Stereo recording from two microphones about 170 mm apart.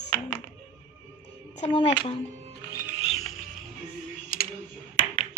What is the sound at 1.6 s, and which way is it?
Speech, 30° left (ahead or behind).